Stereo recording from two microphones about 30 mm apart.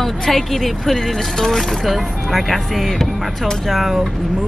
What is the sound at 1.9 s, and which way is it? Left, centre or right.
Speech, centre.